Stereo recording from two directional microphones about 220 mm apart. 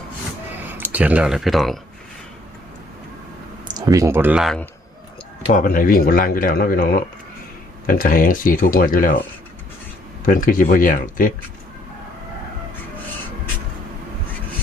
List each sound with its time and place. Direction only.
0.7 s speech: 10° right (ahead or behind)
3.8 s speech: 15° right (ahead or behind)
5.5 s speech: 40° left (ahead or behind)
7.9 s speech: 40° left (ahead or behind)
10.2 s speech: 40° left (ahead or behind)